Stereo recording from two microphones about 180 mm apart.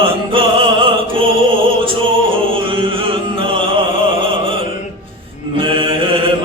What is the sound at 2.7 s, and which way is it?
Chant, 30° right (ahead or behind).